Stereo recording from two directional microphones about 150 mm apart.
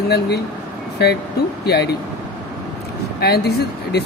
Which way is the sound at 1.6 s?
90° left.